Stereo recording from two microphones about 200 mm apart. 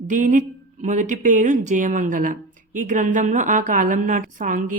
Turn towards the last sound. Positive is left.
turn(degrees=-40)  # may be behind; listen again after turning